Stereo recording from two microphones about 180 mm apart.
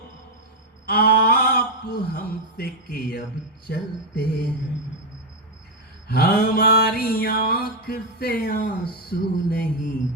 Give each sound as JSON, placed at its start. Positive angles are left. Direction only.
{"t": 0.9, "sound": "a sound", "side_deg": 55}
{"t": 3.7, "sound": "mantra", "side_deg": 60}
{"t": 6.1, "sound": "mantra", "side_deg": 60}